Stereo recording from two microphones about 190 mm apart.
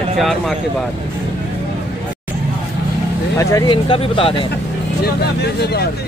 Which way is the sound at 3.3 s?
15° left (ahead or behind).